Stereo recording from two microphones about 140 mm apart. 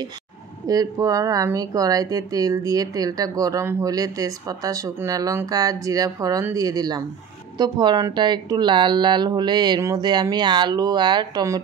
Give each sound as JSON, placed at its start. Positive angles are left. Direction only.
{"t": 0.7, "sound": "speech", "side_deg": -25}